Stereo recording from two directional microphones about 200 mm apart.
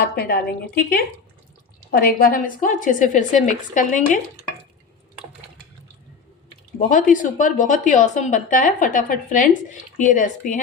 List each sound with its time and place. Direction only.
0.0 s a woman's voice: 50° left (ahead or behind)
6.9 s a woman's voice: 40° left (ahead or behind)